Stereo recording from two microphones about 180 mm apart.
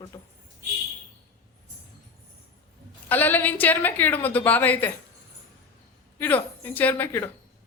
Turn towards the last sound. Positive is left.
turn(degrees=10)  # may be behind; listen again after turning